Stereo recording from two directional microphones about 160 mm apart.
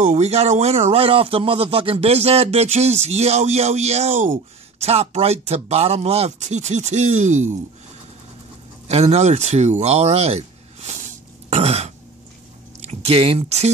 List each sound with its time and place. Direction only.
0.0 s speech: 45° right (ahead or behind)
8.8 s speech: 45° right (ahead or behind)